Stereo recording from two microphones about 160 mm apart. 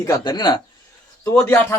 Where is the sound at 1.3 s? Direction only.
15° left (ahead or behind).